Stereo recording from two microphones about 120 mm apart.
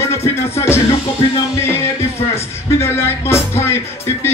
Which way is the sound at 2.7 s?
20° left (ahead or behind).